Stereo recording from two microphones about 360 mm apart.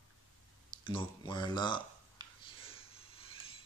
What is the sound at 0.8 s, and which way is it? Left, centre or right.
Speech, centre.